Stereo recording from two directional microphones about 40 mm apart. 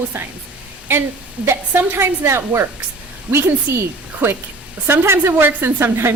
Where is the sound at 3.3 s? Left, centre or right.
Right.